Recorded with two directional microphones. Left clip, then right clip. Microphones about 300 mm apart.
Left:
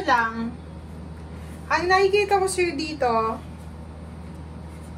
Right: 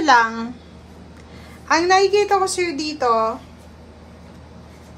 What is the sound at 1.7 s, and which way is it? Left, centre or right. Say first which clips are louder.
A woman's voice: right 4 dB; centre.